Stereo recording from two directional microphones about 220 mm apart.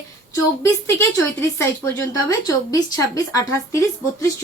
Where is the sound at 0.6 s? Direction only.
10° left (ahead or behind).